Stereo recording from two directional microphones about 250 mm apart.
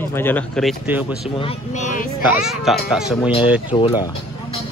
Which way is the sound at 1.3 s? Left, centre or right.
Left.